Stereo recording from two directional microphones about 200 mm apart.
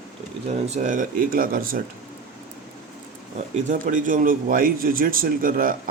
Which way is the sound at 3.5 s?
40° right (ahead or behind).